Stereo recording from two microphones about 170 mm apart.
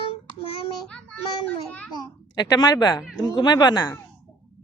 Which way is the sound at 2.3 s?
25° left (ahead or behind).